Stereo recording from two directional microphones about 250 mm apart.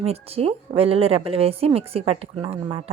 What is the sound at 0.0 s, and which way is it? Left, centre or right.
Speech, right.